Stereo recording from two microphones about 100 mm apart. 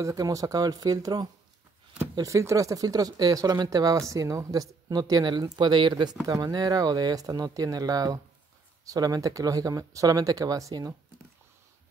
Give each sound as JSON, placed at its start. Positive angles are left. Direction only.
{"t": 0.0, "sound": "speech", "side_deg": -35}
{"t": 6.2, "sound": "speech", "side_deg": -40}